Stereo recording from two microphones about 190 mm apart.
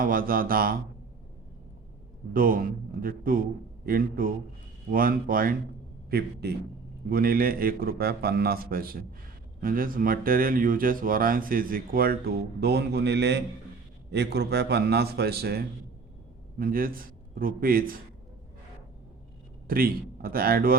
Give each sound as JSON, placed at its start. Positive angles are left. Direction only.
{"t": 0.0, "sound": "speech", "side_deg": -50}
{"t": 2.3, "sound": "a man's voice", "side_deg": -50}
{"t": 19.6, "sound": "speech", "side_deg": -50}